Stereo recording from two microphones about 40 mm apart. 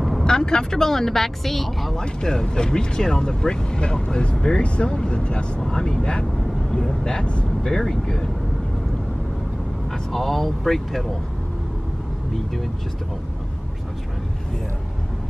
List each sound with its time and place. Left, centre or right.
0.2 s speech: centre
2.0 s speech: left
10.1 s speech: centre